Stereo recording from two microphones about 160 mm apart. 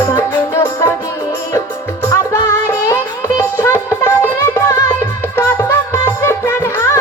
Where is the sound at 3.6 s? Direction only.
15° left (ahead or behind).